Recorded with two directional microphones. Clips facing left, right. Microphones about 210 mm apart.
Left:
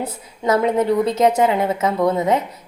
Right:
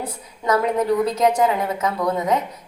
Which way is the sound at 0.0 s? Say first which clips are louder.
Left 3 dB; 25° left (ahead or behind).